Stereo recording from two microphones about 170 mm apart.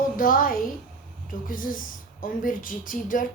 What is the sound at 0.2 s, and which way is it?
A woman's voice, 55° left (ahead or behind).